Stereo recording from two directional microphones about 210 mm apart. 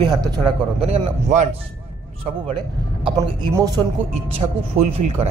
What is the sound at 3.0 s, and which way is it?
Speech, 15° right (ahead or behind).